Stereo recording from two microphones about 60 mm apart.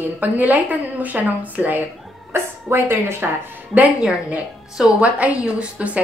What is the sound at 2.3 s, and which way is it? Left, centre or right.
Speech, right.